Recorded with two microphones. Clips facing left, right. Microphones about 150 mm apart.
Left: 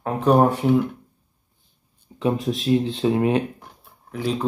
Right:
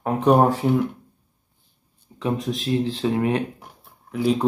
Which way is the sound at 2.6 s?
25° left (ahead or behind).